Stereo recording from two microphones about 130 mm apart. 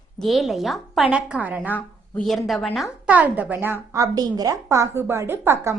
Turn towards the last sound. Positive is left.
turn(degrees=-20)  # may be behind; listen again after turning